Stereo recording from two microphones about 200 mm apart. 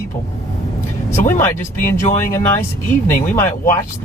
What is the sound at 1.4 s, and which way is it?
Speech, 10° left (ahead or behind).